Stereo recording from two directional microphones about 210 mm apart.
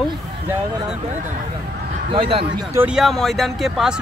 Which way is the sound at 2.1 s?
25° right (ahead or behind).